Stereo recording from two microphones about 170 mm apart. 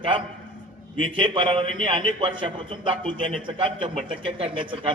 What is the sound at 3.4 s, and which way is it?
A man's voice, 30° right (ahead or behind).